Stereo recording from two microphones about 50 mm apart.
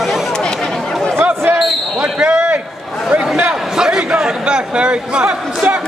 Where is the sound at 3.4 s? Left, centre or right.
Centre.